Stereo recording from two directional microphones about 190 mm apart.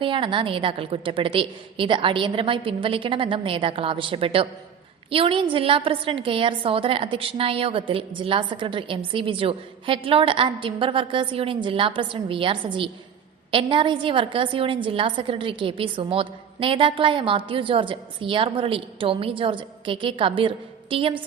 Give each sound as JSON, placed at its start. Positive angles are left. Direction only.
{"t": 0.0, "sound": "a woman's voice", "side_deg": -25}